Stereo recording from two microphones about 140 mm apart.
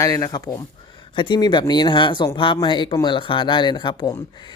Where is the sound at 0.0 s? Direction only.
25° left (ahead or behind).